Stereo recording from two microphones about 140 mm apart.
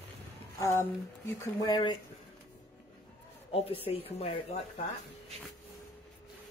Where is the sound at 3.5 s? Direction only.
45° left (ahead or behind).